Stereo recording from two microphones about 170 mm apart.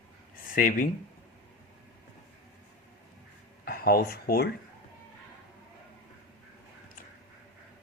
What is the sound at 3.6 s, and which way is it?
Speech, 65° left (ahead or behind).